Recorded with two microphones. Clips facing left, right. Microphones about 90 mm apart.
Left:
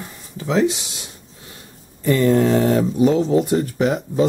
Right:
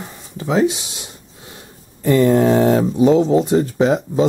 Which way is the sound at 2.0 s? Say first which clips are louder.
Right 3 dB; 20° right (ahead or behind).